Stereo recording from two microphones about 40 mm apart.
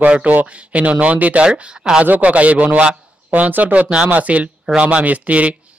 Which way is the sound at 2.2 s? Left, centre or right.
Right.